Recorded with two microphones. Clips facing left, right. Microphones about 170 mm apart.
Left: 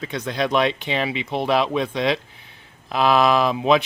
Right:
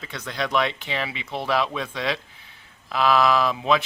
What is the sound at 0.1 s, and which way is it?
Speech, 20° left (ahead or behind).